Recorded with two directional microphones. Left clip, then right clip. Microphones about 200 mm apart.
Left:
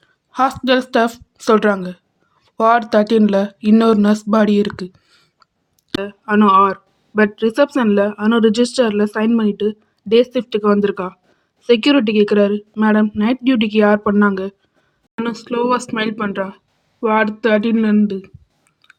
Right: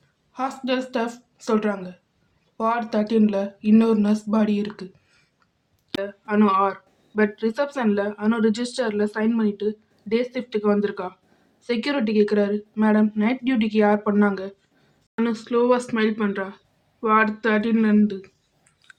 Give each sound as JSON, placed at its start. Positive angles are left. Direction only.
{"t": 0.3, "sound": "a woman's voice", "side_deg": 45}